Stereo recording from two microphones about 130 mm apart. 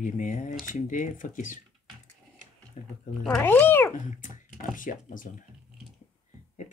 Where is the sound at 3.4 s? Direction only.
15° left (ahead or behind).